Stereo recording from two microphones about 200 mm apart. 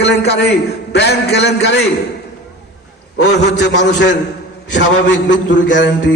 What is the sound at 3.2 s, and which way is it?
A man's voice, 60° left (ahead or behind).